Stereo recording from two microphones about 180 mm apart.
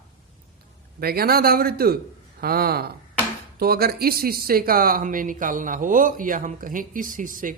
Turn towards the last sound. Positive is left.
turn(degrees=-50)  # may be behind; listen again after turning